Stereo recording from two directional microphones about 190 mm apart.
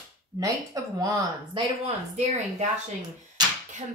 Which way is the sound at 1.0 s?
20° right (ahead or behind).